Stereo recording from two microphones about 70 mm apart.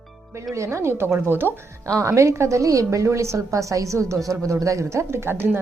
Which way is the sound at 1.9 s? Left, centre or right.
Right.